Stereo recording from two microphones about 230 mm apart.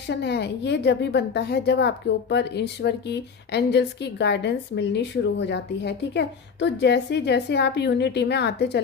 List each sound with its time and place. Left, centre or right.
0.1 s speech: left